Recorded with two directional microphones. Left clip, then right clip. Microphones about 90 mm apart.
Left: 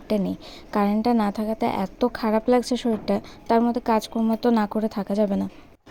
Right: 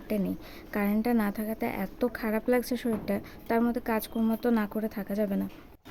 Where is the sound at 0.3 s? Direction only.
40° left (ahead or behind).